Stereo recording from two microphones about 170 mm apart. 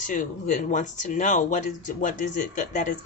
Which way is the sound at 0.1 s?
45° left (ahead or behind).